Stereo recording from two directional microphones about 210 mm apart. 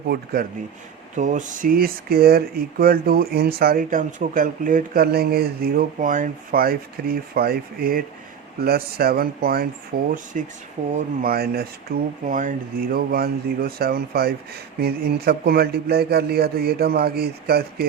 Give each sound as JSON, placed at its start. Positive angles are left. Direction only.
{"t": 0.1, "sound": "speech", "side_deg": -50}
{"t": 1.1, "sound": "speech", "side_deg": -35}